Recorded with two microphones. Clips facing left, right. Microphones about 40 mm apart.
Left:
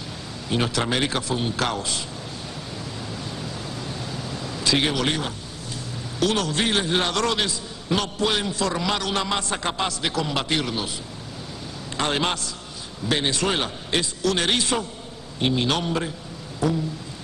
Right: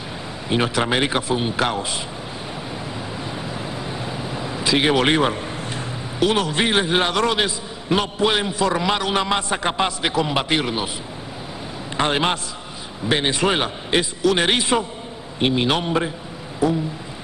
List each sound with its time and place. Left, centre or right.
0.5 s a man's voice: right
3.3 s a sound: right
4.9 s a man's voice: right
6.1 s a man's voice: right
12.0 s a man's voice: right